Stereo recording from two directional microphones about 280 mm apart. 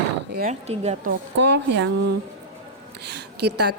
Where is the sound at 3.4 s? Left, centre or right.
Right.